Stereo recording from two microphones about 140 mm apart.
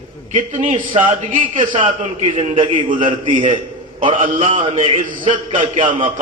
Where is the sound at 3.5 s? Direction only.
35° right (ahead or behind).